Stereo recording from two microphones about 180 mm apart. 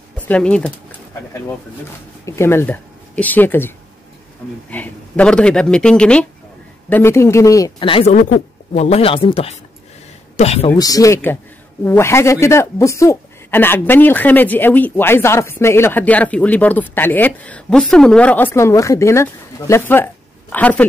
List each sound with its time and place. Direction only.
0.2 s speech: 5° left (ahead or behind)
2.2 s speech: 15° left (ahead or behind)
7.9 s a woman's voice: 35° left (ahead or behind)
10.7 s speech: 20° left (ahead or behind)